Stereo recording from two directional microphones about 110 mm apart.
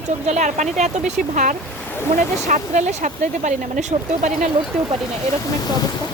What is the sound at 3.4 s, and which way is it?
Speech, 90° right.